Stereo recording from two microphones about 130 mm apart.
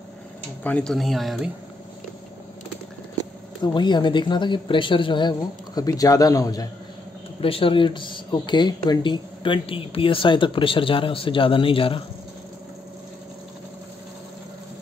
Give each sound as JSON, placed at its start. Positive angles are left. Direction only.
{"t": 0.7, "sound": "speech", "side_deg": 10}
{"t": 3.6, "sound": "speech", "side_deg": 35}
{"t": 5.8, "sound": "a man's voice", "side_deg": 30}
{"t": 7.3, "sound": "speech", "side_deg": 45}